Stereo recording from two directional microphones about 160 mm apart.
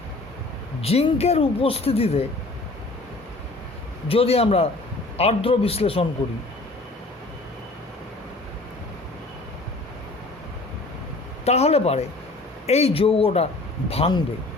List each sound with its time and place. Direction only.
0.8 s speech: 40° left (ahead or behind)
4.1 s speech: 40° left (ahead or behind)
11.4 s speech: 40° left (ahead or behind)